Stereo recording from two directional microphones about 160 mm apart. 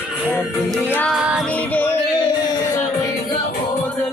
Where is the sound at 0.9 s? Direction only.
10° left (ahead or behind).